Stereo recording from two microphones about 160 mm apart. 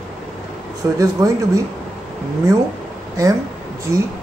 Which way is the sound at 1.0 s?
20° right (ahead or behind).